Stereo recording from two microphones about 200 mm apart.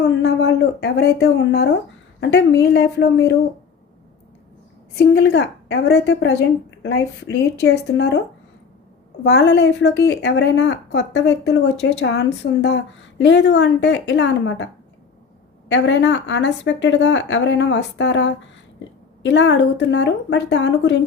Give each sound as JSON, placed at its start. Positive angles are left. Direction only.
{"t": 0.0, "sound": "a woman's voice", "side_deg": 60}
{"t": 4.9, "sound": "a woman's voice", "side_deg": 60}
{"t": 9.2, "sound": "a woman's voice", "side_deg": 60}
{"t": 15.7, "sound": "a woman's voice", "side_deg": 70}